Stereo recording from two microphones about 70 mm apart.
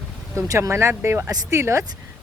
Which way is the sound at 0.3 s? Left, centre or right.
Right.